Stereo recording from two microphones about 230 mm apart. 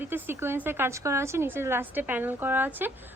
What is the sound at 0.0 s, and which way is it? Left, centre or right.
A woman's voice, centre.